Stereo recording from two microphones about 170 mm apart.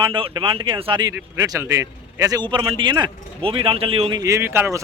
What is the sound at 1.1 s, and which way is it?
Speech, 20° right (ahead or behind).